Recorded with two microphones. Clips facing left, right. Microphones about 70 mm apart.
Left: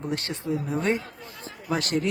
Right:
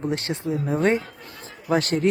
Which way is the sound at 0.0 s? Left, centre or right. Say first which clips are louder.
Right 4 dB; right.